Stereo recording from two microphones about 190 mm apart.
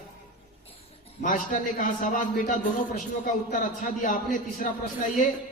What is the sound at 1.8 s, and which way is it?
A man's voice, 45° left (ahead or behind).